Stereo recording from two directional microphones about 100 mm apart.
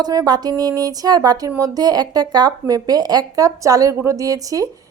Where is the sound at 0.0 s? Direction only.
40° right (ahead or behind).